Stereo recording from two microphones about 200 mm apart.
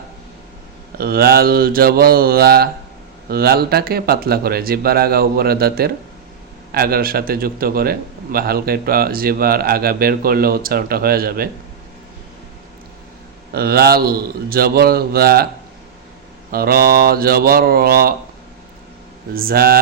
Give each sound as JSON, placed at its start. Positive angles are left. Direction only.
{"t": 0.9, "sound": "a man's voice", "side_deg": -50}
{"t": 13.5, "sound": "a man's voice", "side_deg": -50}
{"t": 16.5, "sound": "a man's voice", "side_deg": -50}
{"t": 19.3, "sound": "a man's voice", "side_deg": -45}